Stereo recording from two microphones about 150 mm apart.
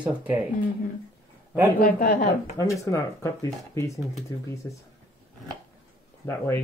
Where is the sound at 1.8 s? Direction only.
70° left (ahead or behind).